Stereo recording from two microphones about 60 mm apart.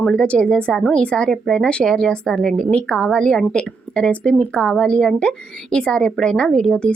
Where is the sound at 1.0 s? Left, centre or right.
Left.